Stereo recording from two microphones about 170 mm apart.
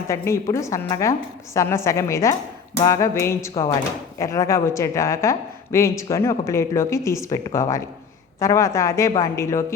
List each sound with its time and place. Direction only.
0.1 s a woman's voice: 15° left (ahead or behind)